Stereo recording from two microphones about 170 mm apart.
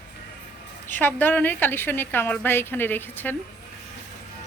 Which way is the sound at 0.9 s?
10° left (ahead or behind).